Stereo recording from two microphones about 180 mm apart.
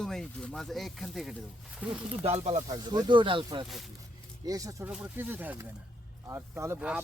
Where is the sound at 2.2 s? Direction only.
35° right (ahead or behind).